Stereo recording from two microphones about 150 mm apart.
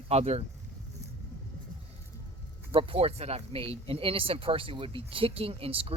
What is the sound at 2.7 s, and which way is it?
Speech, 40° right (ahead or behind).